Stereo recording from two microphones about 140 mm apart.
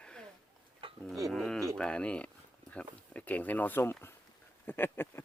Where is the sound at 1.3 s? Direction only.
Centre (ahead or behind).